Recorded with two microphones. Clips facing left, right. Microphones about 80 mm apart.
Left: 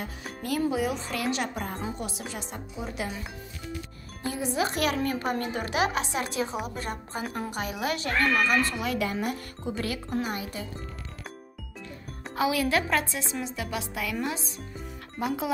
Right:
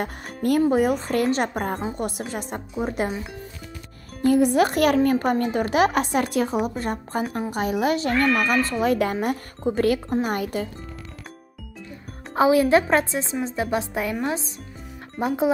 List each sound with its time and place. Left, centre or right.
0.0 s speech: right
4.3 s a woman's voice: right
12.4 s a woman's voice: right